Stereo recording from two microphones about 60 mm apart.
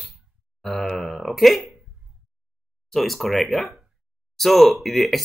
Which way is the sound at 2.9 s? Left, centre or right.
Centre.